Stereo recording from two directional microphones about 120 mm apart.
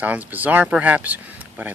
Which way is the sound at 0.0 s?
10° right (ahead or behind).